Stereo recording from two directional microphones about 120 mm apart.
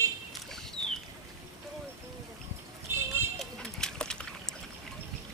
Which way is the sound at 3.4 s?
5° left (ahead or behind).